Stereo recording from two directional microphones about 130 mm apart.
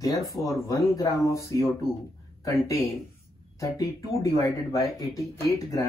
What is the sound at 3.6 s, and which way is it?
Speech, 25° left (ahead or behind).